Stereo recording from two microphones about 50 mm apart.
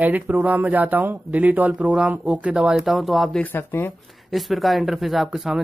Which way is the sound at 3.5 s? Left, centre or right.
Left.